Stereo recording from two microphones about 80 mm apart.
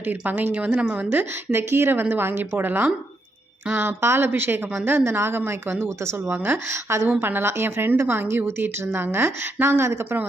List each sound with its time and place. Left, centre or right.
0.0 s a woman's voice: right